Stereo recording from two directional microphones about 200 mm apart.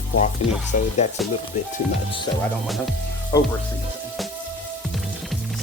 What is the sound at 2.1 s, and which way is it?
Speech, 25° left (ahead or behind).